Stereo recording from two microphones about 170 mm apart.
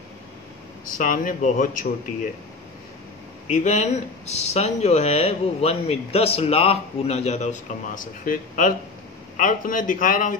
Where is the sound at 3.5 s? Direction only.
45° left (ahead or behind).